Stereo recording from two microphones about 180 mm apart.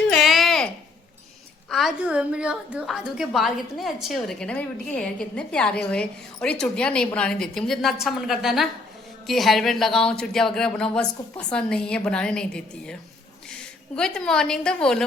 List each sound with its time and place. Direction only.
0.1 s babbling: centre (ahead or behind)
1.7 s a woman's voice: 5° right (ahead or behind)